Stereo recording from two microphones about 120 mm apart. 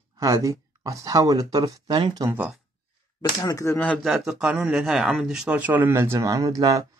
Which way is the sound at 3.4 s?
25° left (ahead or behind).